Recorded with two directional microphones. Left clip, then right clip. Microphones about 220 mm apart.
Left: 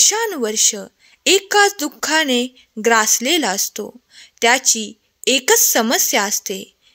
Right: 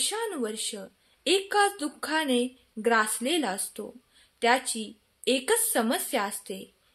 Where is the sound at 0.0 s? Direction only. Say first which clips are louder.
Left 13 dB; 45° left (ahead or behind).